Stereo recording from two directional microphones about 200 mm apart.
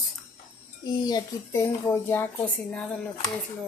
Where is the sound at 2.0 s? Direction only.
10° left (ahead or behind).